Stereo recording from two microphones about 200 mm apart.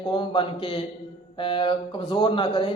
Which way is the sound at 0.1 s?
25° left (ahead or behind).